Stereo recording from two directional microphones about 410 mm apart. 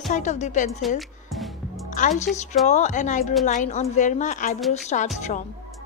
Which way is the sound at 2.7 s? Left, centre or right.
Centre.